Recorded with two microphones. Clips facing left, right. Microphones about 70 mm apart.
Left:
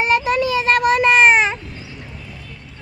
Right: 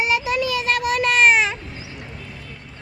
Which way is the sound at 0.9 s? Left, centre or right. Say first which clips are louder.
Left 1 dB; left.